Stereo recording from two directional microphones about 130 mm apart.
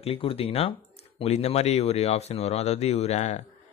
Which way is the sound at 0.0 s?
45° left (ahead or behind).